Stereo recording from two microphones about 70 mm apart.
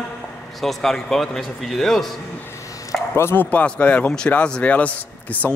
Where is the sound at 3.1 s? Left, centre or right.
Left.